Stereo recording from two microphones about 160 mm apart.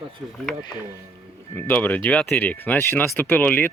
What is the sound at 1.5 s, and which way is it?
Speech, 10° left (ahead or behind).